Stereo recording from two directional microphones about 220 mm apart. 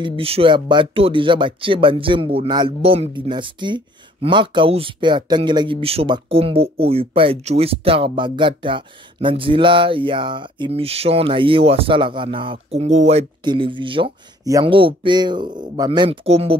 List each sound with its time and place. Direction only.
0.0 s speech: 25° right (ahead or behind)